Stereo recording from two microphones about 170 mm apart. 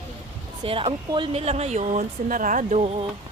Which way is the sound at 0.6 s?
30° right (ahead or behind).